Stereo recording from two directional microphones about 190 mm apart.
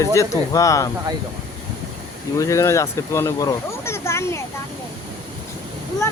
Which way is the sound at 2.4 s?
15° left (ahead or behind).